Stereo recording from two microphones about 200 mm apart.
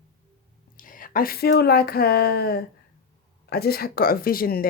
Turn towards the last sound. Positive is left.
turn(degrees=45)  # may be behind; listen again after turning